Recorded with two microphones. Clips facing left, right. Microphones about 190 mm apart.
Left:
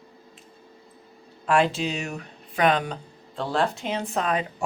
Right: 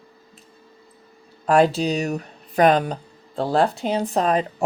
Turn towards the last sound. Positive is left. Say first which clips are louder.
# right 5 dB
turn(degrees=-35)  # may be behind; listen again after turning